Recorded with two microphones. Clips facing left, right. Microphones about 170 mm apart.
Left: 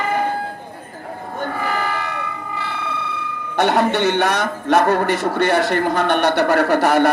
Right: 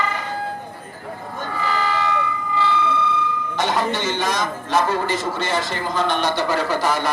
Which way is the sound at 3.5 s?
60° left (ahead or behind).